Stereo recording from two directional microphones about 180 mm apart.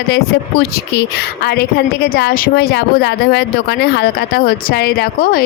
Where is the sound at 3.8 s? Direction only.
60° left (ahead or behind).